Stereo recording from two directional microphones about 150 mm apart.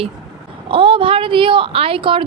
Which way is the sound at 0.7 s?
35° right (ahead or behind).